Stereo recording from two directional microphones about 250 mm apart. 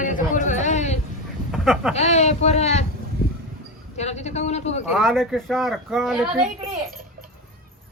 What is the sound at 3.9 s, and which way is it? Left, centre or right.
Speech, left.